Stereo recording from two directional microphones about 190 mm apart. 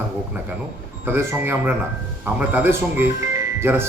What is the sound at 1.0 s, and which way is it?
Speech, 15° right (ahead or behind).